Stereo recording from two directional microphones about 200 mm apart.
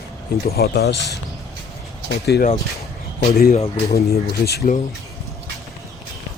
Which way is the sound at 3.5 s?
30° left (ahead or behind).